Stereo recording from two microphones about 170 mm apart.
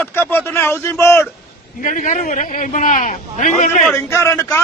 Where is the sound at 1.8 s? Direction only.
50° left (ahead or behind).